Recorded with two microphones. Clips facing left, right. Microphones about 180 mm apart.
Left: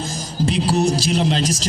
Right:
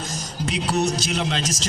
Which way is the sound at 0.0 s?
30° left (ahead or behind).